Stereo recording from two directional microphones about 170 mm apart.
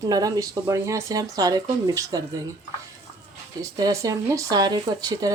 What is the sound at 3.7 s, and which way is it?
Speech, 20° right (ahead or behind).